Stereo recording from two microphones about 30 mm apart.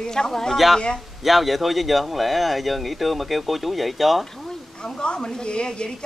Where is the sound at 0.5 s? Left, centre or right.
Centre.